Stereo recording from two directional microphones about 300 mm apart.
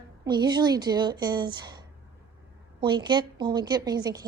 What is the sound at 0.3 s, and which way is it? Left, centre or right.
A woman's voice, centre.